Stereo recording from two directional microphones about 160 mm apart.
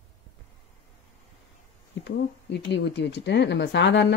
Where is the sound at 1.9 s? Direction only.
90° left.